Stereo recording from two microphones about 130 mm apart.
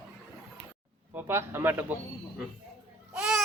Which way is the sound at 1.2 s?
15° right (ahead or behind).